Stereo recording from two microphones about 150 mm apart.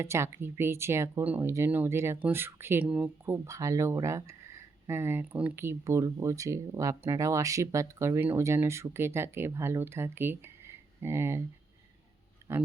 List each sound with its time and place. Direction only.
0.0 s speech: 20° right (ahead or behind)
12.5 s speech: 15° right (ahead or behind)